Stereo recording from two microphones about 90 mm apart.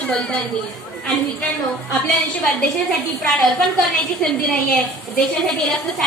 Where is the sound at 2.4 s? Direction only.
5° left (ahead or behind).